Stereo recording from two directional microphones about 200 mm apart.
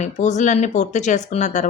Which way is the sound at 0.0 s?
35° left (ahead or behind).